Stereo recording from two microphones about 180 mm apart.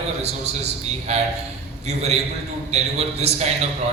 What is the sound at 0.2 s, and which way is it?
A man's voice, 35° right (ahead or behind).